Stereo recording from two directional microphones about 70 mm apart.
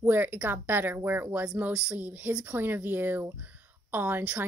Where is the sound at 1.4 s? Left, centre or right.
Centre.